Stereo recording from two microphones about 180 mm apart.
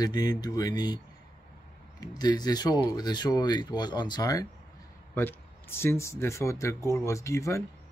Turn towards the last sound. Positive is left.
turn(degrees=15)  # may be behind; listen again after turning